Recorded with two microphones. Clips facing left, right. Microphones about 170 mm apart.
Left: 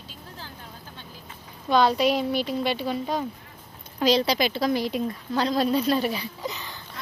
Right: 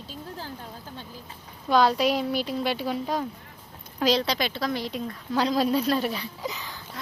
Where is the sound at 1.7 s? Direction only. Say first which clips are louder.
Left 1 dB; centre (ahead or behind).